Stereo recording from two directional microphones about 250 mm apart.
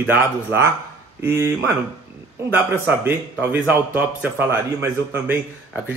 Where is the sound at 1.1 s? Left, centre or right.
Centre.